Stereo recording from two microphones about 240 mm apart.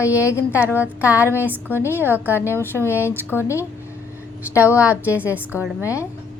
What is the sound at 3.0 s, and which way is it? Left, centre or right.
Speech, centre.